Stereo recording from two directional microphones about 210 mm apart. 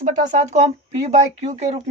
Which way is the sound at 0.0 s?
35° right (ahead or behind).